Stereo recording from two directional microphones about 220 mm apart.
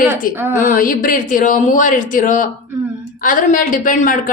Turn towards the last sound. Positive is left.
turn(degrees=35)  # may be behind; listen again after turning